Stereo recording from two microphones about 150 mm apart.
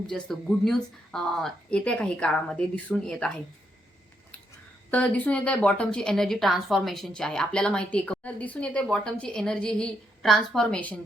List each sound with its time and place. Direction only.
0.1 s a woman's voice: 5° left (ahead or behind)
4.9 s a woman's voice: 10° left (ahead or behind)